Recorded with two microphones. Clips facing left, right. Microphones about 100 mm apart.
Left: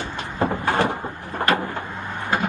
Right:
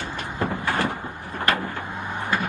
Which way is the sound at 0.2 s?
20° left (ahead or behind).